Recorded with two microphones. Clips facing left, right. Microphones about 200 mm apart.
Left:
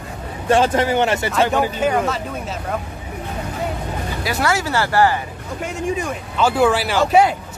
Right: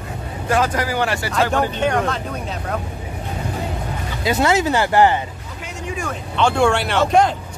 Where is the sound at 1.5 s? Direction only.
5° left (ahead or behind).